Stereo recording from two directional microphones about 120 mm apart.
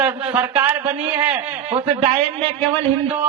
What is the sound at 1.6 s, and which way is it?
Speech, 50° right (ahead or behind).